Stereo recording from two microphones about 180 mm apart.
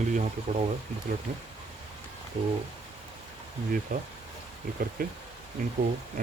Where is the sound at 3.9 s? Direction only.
45° right (ahead or behind).